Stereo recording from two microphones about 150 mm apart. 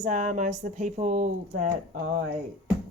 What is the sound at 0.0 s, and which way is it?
Speech, 55° right (ahead or behind).